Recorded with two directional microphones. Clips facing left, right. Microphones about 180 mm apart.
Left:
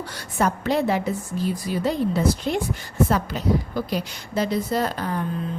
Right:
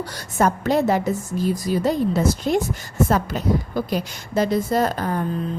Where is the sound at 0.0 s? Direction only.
45° right (ahead or behind).